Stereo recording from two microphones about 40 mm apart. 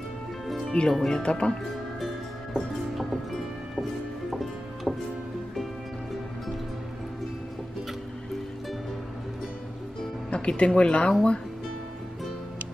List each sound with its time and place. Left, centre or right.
0.7 s speech: centre
4.3 s music: centre
10.3 s speech: left